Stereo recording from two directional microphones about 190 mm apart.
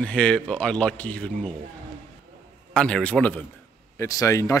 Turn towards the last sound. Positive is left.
turn(degrees=15)  # may be behind; listen again after turning